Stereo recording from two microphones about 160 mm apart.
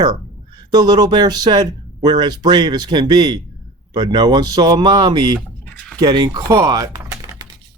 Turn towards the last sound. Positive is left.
turn(degrees=-20)  # may be behind; listen again after turning